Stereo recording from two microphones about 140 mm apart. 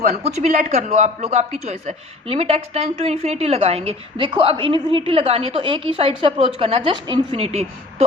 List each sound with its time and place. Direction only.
0.0 s a woman's voice: 55° right (ahead or behind)
4.3 s a woman's voice: 35° right (ahead or behind)